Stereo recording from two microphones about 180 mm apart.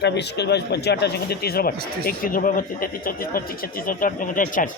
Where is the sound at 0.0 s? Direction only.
70° left (ahead or behind).